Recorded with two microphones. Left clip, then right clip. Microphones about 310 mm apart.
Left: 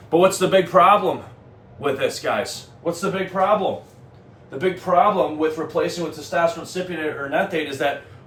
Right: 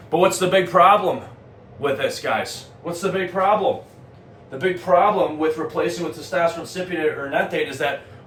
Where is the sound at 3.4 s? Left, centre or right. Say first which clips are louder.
Even; centre.